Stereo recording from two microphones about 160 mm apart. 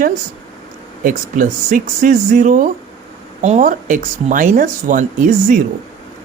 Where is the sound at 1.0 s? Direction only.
55° right (ahead or behind).